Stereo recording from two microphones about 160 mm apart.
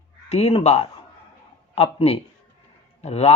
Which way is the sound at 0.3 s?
40° left (ahead or behind).